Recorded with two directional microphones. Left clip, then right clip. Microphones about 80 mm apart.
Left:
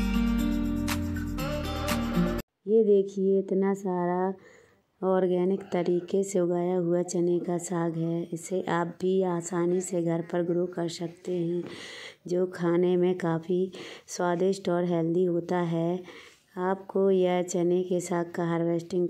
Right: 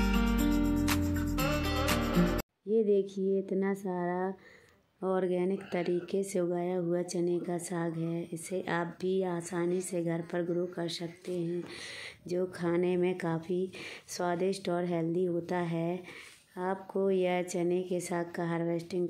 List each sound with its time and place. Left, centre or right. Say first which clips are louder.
0.0 s music: left 1 dB; centre
2.7 s speech: left 6 dB; left